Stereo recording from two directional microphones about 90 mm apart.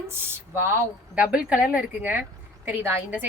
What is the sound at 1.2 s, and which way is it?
A woman's voice, 15° right (ahead or behind).